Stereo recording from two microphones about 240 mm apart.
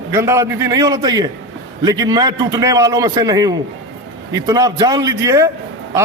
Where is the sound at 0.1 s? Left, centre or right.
Centre.